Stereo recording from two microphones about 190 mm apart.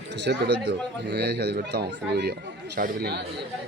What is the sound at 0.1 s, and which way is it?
Speech, 65° right (ahead or behind).